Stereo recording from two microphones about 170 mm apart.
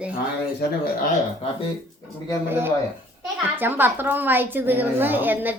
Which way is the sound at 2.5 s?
10° right (ahead or behind).